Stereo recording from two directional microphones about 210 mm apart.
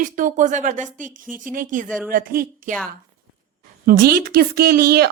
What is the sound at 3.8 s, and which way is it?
Speech, 45° right (ahead or behind).